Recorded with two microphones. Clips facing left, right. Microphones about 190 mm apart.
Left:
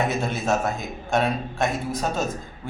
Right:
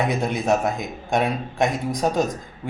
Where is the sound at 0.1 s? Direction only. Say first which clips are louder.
Right 3 dB; 15° right (ahead or behind).